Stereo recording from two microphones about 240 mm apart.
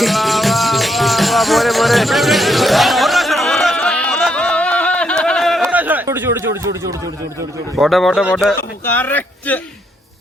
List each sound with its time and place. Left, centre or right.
0.0 s music: centre
5.6 s a sound: centre
7.8 s a man's voice: centre